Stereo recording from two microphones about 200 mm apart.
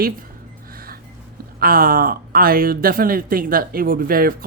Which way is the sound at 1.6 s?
45° right (ahead or behind).